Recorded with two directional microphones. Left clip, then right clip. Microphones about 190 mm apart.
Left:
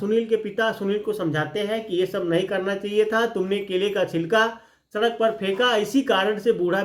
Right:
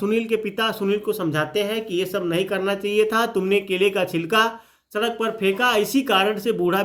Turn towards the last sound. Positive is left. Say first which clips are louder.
# even
turn(degrees=-40)  # may be behind; listen again after turning